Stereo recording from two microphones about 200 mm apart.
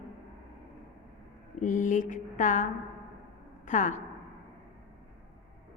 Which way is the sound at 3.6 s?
40° left (ahead or behind).